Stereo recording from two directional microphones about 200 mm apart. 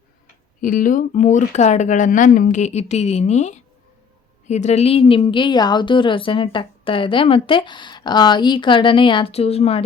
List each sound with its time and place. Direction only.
0.6 s a woman's voice: 40° left (ahead or behind)